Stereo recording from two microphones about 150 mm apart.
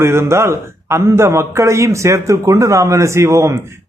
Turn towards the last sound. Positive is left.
turn(degrees=-20)  # may be behind; listen again after turning